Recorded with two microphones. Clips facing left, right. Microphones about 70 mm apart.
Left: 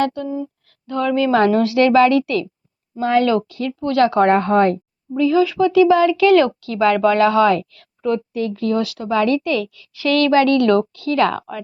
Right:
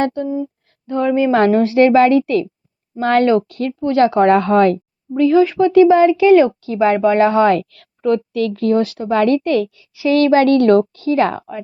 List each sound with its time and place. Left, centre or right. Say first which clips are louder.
0.0 s speech: right 2 dB; right
1.3 s speech: right 2 dB; right
3.0 s speech: right 3 dB; right
3.8 s speech: right 2 dB; right
4.3 s speech: right 2 dB; right
6.1 s speech: right 3 dB; right
7.7 s a sound: right 4 dB; right
8.3 s speech: right 4 dB; right
8.6 s speech: right 5 dB; right
9.7 s speech: right 3 dB; centre